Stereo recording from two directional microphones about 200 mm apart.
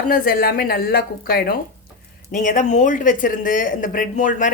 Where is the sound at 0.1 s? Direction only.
45° left (ahead or behind).